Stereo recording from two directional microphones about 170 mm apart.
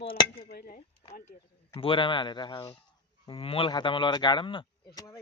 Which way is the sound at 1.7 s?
30° left (ahead or behind).